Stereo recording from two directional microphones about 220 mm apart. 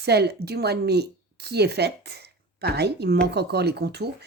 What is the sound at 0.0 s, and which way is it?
Speech, 50° right (ahead or behind).